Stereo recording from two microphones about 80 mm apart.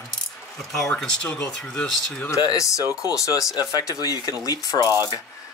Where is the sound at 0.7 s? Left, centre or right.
Centre.